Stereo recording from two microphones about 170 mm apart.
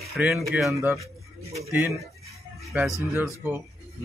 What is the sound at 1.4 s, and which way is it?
Speech, 40° right (ahead or behind).